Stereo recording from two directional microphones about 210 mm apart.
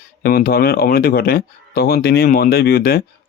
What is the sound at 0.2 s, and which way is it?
Speech, 45° left (ahead or behind).